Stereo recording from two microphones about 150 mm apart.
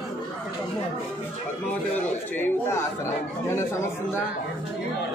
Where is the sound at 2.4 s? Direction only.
15° left (ahead or behind).